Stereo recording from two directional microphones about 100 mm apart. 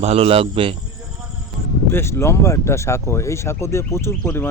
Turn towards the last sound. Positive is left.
turn(degrees=25)  # may be behind; listen again after turning